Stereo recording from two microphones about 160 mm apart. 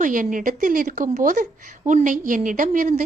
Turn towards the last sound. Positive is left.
turn(degrees=-55)  # may be behind; listen again after turning